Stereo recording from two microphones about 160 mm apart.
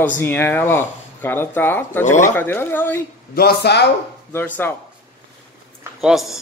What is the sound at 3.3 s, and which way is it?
Speech, 85° left.